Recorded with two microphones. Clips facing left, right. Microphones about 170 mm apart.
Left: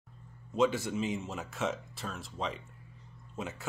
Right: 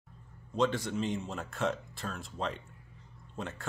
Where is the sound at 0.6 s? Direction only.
5° left (ahead or behind).